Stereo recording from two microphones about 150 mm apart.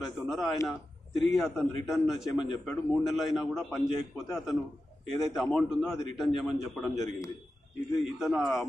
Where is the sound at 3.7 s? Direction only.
15° left (ahead or behind).